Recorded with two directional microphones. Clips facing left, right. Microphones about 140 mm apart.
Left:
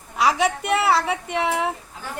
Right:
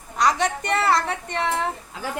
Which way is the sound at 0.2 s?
5° left (ahead or behind).